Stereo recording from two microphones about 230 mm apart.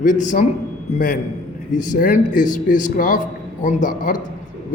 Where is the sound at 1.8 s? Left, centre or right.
Left.